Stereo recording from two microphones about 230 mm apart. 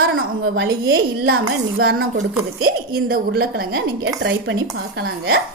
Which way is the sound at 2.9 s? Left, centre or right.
Right.